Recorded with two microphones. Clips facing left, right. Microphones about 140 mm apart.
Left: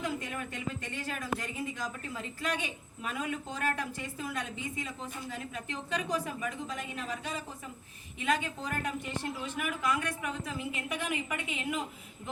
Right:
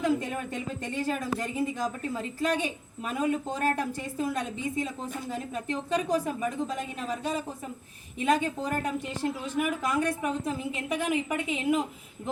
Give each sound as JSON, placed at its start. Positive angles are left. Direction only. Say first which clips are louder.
{"t": 0.2, "sound": "speech", "louder": "right 6 dB", "side_deg": -35}